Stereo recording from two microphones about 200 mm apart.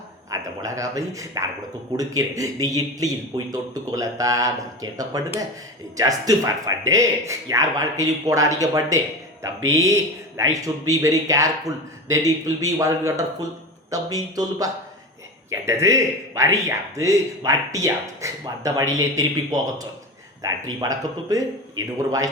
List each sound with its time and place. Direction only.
0.3 s speech: 15° right (ahead or behind)